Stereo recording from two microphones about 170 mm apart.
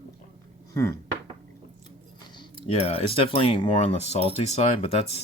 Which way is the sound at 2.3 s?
35° left (ahead or behind).